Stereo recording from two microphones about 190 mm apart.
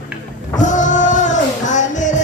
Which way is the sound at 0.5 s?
40° left (ahead or behind).